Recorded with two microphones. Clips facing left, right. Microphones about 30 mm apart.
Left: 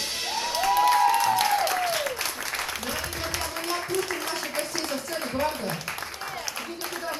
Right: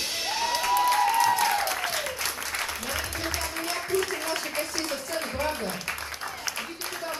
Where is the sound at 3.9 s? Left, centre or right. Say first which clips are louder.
Right 3 dB; left.